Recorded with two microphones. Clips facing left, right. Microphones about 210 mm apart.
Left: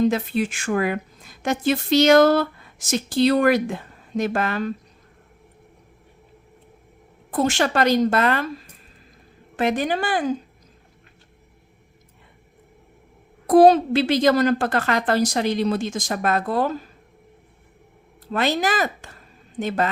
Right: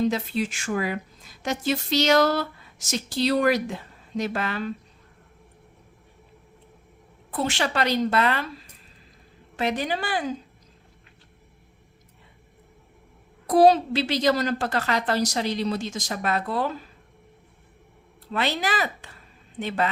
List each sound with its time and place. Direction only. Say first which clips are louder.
0.1 s speech: left 4 dB; 55° left (ahead or behind)
7.3 s speech: left 5 dB; 45° left (ahead or behind)
13.5 s speech: left 4 dB; 50° left (ahead or behind)
18.3 s speech: left 5 dB; 45° left (ahead or behind)